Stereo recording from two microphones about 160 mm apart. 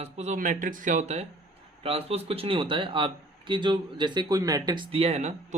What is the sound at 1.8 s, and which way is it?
Speech, 40° right (ahead or behind).